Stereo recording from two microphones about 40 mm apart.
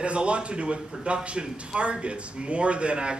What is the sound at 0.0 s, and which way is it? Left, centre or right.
A man's voice, right.